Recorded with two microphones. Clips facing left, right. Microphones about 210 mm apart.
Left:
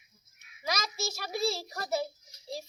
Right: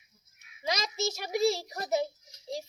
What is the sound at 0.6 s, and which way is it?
A child's voice, 20° right (ahead or behind).